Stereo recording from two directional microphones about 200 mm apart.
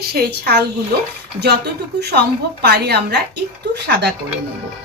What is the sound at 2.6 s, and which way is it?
Speech, 55° right (ahead or behind).